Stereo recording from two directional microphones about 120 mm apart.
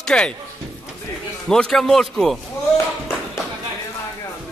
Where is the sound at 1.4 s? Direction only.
5° left (ahead or behind).